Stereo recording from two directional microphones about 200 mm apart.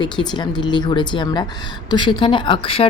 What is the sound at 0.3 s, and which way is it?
A woman's voice, 20° left (ahead or behind).